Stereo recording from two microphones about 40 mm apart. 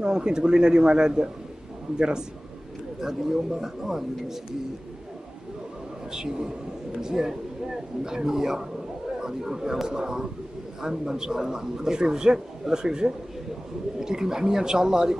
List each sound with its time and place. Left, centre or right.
0.0 s speech: centre
6.1 s speech: centre